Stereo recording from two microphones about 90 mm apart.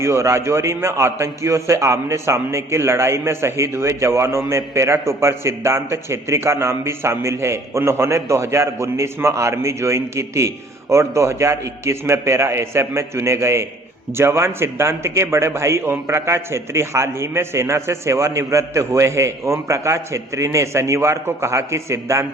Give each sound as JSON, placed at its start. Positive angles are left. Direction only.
{"t": 0.0, "sound": "a man's voice", "side_deg": -30}